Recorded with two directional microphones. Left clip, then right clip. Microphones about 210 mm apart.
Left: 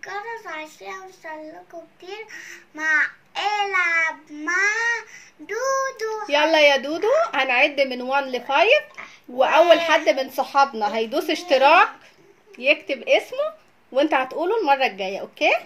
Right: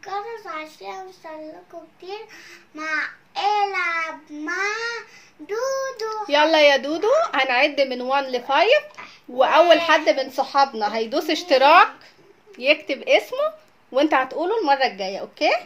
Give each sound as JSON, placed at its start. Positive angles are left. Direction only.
{"t": 0.0, "sound": "child singing", "side_deg": 0}
{"t": 2.7, "sound": "a child's voice", "side_deg": 0}